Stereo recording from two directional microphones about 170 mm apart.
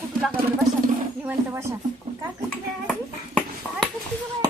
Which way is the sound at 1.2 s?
10° right (ahead or behind).